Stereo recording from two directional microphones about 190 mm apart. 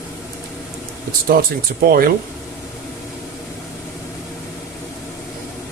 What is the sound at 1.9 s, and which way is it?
Speech, 50° right (ahead or behind).